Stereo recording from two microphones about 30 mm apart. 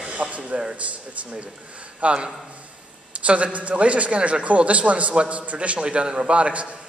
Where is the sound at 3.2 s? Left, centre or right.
Right.